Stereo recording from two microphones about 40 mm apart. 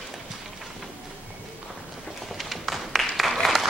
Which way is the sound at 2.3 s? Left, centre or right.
Centre.